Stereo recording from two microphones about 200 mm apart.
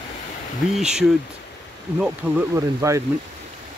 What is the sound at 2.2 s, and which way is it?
Speech, 10° right (ahead or behind).